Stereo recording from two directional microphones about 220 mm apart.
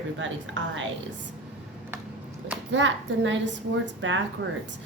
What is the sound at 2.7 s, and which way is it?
A woman's voice, 55° right (ahead or behind).